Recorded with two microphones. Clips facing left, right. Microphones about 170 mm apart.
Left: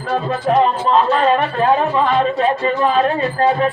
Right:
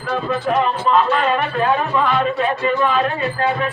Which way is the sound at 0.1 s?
35° left (ahead or behind).